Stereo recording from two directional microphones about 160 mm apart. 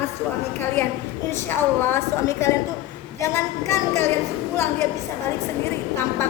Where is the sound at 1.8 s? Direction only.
15° left (ahead or behind).